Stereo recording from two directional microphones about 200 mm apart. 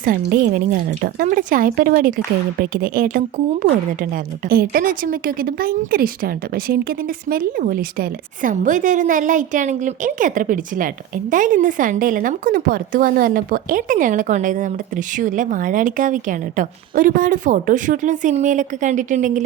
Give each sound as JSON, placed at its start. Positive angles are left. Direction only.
{"t": 0.0, "sound": "a woman's voice", "side_deg": -45}